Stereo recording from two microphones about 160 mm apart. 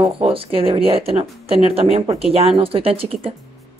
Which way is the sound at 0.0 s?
35° right (ahead or behind).